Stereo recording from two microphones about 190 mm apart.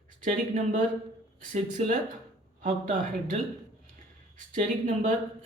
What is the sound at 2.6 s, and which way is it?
Speech, 40° right (ahead or behind).